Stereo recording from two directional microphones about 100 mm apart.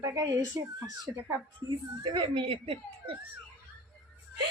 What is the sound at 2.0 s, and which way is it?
Speech, 50° right (ahead or behind).